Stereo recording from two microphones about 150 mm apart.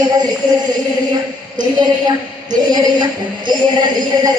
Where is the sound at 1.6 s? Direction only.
25° right (ahead or behind).